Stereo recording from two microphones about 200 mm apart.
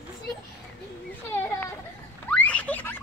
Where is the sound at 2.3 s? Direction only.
10° left (ahead or behind).